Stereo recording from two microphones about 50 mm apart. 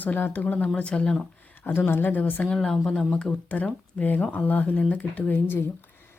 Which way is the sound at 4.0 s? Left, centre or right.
Left.